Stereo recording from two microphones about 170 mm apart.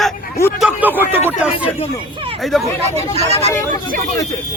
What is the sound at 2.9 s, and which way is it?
Speech, 40° right (ahead or behind).